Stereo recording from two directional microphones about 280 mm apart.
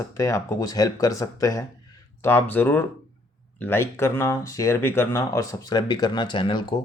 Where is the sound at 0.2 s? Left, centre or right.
Centre.